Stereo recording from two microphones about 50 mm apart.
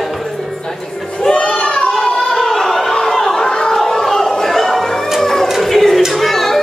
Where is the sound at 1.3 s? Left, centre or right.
Centre.